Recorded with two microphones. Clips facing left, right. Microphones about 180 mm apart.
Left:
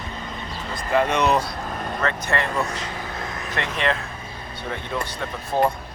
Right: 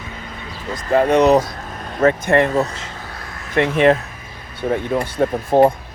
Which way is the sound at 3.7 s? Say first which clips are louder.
Right 10 dB; 50° right (ahead or behind).